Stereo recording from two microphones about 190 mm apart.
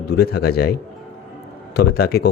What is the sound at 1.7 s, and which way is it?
Speech, 55° left (ahead or behind).